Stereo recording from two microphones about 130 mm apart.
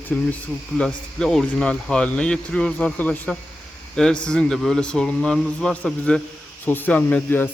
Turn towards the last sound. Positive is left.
turn(degrees=15)  # may be behind; listen again after turning